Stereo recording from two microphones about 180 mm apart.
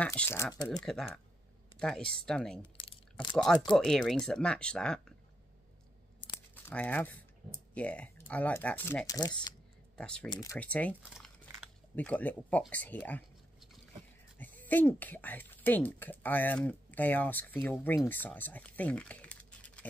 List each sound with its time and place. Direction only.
0.0 s speech: 10° left (ahead or behind)
0.8 s speech: centre (ahead or behind)
2.6 s a sound: 25° left (ahead or behind)
3.3 s speech: 5° left (ahead or behind)
6.5 s speech: 10° left (ahead or behind)
9.9 s speech: 5° left (ahead or behind)
10.3 s speech: 20° left (ahead or behind)
10.6 s speech: 10° left (ahead or behind)
11.0 s crumpling: 5° right (ahead or behind)
11.9 s speech: 10° left (ahead or behind)
14.7 s speech: 10° left (ahead or behind)